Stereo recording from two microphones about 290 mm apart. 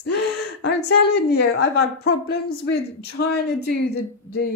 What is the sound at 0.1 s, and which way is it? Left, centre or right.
A woman's voice, left.